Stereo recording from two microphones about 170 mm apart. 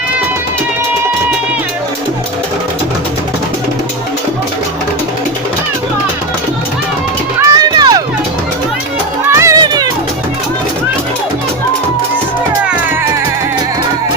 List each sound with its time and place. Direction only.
7.3 s run: 25° right (ahead or behind)
9.3 s music: 15° right (ahead or behind)